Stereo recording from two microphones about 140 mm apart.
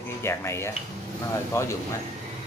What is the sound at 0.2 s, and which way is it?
Speech, 20° left (ahead or behind).